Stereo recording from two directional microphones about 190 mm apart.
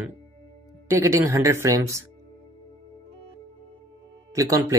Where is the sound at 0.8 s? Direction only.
15° right (ahead or behind).